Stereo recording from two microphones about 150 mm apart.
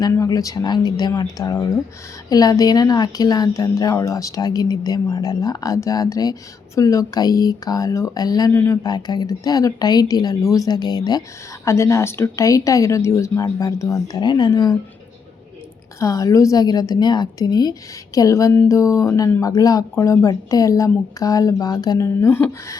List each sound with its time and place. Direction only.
0.0 s a woman's voice: 20° left (ahead or behind)
16.0 s a woman's voice: 20° left (ahead or behind)